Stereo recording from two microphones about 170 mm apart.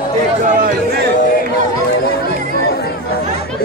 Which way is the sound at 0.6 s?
60° right (ahead or behind).